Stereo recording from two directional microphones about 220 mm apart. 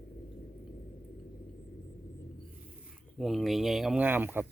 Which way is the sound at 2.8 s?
Centre (ahead or behind).